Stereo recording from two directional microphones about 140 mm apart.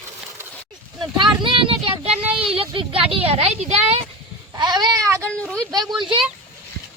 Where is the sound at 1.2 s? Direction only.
35° right (ahead or behind).